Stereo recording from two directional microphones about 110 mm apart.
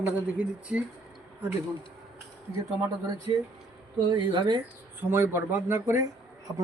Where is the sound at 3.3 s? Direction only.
35° right (ahead or behind).